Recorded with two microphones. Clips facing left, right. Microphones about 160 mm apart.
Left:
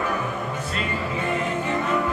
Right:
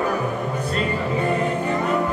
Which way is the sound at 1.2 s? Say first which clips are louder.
Right 3 dB; 35° right (ahead or behind).